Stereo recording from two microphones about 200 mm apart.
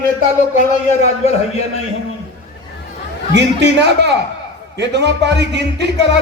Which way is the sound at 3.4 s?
60° right (ahead or behind).